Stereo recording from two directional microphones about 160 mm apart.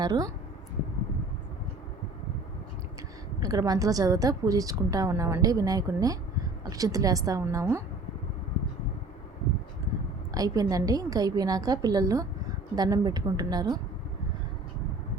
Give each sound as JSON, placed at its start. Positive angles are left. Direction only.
{"t": 0.0, "sound": "speech", "side_deg": -25}
{"t": 3.4, "sound": "a woman's voice", "side_deg": -25}
{"t": 10.3, "sound": "a woman's voice", "side_deg": -20}